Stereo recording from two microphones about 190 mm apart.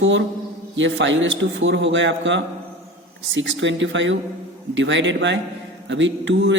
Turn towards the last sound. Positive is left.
turn(degrees=-75)  # may be behind; listen again after turning